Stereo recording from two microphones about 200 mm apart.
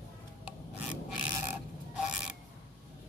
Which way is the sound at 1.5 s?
5° right (ahead or behind).